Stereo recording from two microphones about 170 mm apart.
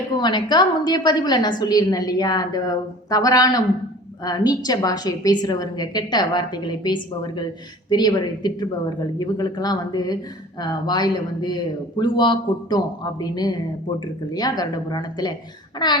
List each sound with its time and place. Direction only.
0.2 s a woman's voice: 25° left (ahead or behind)